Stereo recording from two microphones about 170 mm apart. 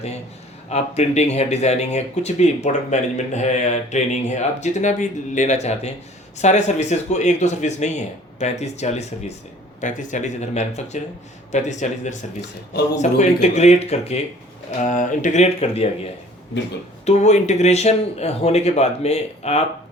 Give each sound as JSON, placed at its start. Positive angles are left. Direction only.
{"t": 0.7, "sound": "speech", "side_deg": 40}
{"t": 17.1, "sound": "speech", "side_deg": 40}